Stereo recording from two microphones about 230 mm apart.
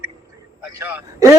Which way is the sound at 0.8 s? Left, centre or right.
Centre.